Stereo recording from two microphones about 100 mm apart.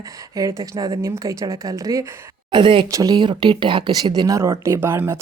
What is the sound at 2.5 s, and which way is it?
Speech, 55° right (ahead or behind).